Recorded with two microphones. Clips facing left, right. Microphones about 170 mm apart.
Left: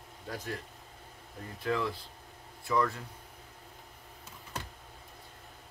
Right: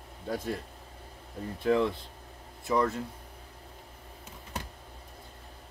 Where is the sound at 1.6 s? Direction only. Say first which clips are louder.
Right 6 dB; 25° right (ahead or behind).